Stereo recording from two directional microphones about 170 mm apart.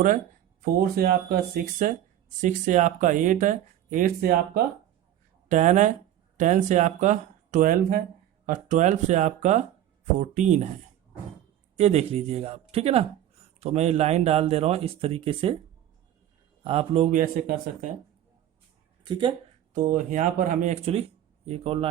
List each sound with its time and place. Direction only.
0.6 s speech: 60° right (ahead or behind)
2.4 s speech: 50° right (ahead or behind)
5.5 s speech: 45° right (ahead or behind)
11.8 s speech: 40° right (ahead or behind)
16.6 s speech: 35° right (ahead or behind)
17.1 s speech: 50° right (ahead or behind)
19.0 s speech: 25° right (ahead or behind)
19.7 s speech: 50° right (ahead or behind)